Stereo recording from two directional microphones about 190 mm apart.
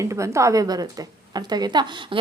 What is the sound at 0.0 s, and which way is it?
Speech, 15° right (ahead or behind).